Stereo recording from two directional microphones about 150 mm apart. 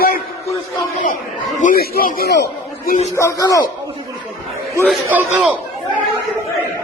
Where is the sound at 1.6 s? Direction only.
75° left (ahead or behind).